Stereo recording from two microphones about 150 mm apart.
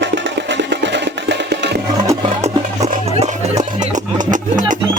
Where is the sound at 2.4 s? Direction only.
45° right (ahead or behind).